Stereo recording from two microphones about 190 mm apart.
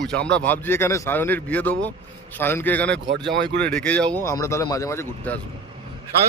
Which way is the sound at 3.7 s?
5° left (ahead or behind).